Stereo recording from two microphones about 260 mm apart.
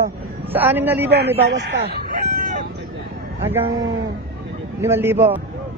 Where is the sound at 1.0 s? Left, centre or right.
Right.